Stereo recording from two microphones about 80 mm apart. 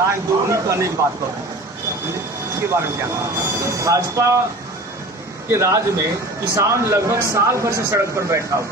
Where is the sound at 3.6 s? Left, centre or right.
Right.